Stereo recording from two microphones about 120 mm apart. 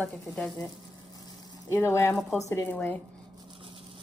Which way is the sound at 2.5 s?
15° left (ahead or behind).